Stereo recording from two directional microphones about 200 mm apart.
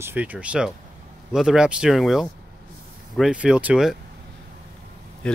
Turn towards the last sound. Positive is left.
turn(degrees=5)  # may be behind; listen again after turning